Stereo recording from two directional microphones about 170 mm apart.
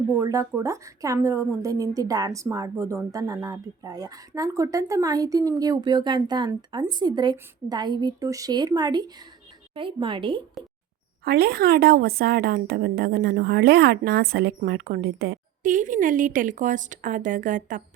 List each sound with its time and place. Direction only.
0.2 s a woman's voice: 20° right (ahead or behind)
11.3 s a woman's voice: 65° right (ahead or behind)